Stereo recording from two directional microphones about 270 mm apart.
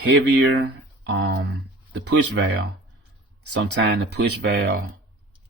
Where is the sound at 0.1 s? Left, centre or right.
Right.